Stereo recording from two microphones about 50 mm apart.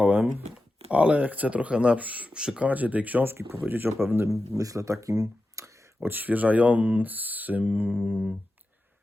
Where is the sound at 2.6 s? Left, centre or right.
Right.